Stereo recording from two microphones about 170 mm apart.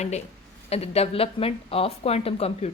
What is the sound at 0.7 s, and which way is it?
A woman's voice, 35° left (ahead or behind).